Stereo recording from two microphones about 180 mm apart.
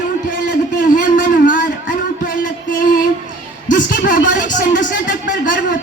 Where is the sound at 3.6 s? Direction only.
45° left (ahead or behind).